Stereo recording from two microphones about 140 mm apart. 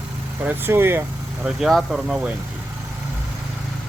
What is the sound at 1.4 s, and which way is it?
Speech, centre (ahead or behind).